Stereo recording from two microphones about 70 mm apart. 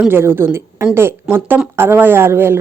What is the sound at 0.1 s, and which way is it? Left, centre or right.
Speech, right.